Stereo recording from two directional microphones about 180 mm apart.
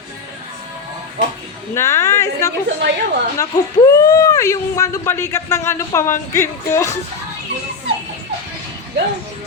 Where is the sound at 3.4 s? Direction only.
20° left (ahead or behind).